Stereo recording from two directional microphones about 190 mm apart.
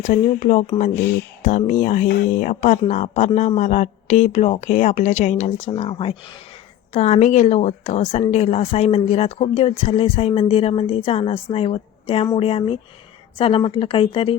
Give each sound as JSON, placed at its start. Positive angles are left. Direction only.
{"t": 0.0, "sound": "a woman's voice", "side_deg": 45}